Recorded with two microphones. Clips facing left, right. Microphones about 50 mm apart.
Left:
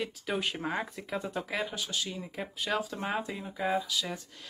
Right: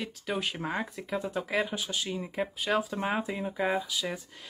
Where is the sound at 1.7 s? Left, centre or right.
Centre.